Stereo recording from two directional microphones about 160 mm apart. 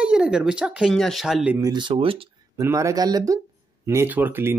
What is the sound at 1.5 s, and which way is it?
Speech, 25° right (ahead or behind).